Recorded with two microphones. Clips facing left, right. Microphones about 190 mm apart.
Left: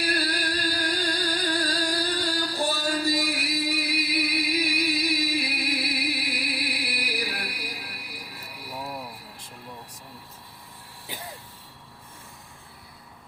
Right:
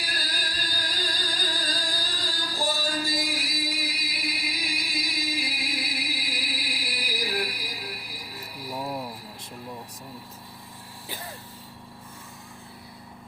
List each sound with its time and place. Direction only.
0.0 s music: 65° left (ahead or behind)